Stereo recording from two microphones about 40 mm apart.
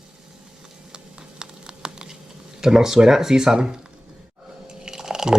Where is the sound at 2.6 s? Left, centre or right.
Centre.